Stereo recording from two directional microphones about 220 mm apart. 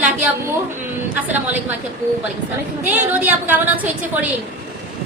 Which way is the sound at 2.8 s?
10° right (ahead or behind).